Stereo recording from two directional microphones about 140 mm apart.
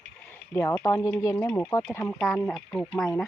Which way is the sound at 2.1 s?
5° left (ahead or behind).